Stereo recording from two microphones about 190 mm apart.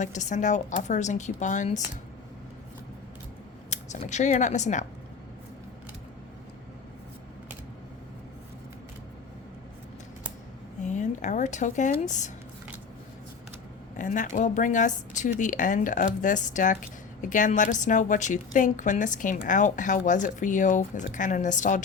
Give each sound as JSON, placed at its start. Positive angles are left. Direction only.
{"t": 0.0, "sound": "a woman's voice", "side_deg": 40}
{"t": 3.7, "sound": "speech", "side_deg": 40}
{"t": 10.8, "sound": "speech", "side_deg": 40}
{"t": 13.9, "sound": "a woman's voice", "side_deg": 40}